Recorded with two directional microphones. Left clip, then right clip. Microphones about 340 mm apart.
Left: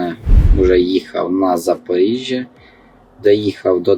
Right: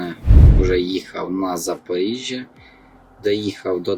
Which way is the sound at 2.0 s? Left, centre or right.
Left.